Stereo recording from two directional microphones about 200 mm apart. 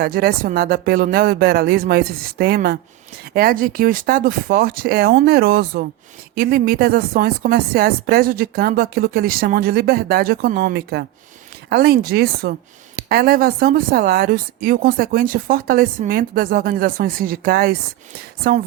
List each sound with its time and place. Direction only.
0.0 s a woman's voice: 50° right (ahead or behind)